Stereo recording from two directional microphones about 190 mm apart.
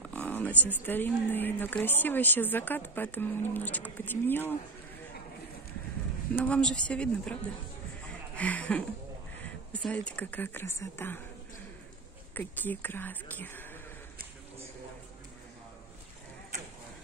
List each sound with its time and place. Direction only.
0.1 s a woman's voice: 10° left (ahead or behind)
6.3 s speech: 5° left (ahead or behind)
8.4 s a woman's voice: 5° left (ahead or behind)
12.4 s a woman's voice: 10° left (ahead or behind)